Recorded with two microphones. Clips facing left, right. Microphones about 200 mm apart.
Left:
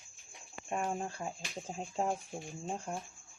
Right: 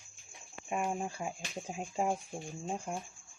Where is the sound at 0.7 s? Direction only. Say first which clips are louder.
Right 1 dB; 5° right (ahead or behind).